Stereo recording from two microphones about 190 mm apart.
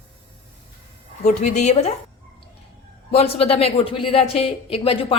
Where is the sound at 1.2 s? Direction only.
35° left (ahead or behind).